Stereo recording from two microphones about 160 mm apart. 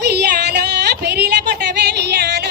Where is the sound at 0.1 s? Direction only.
90° right.